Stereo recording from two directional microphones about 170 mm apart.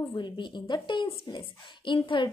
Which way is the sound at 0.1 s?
25° left (ahead or behind).